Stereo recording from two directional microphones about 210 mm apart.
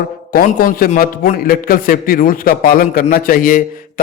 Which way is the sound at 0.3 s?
45° left (ahead or behind).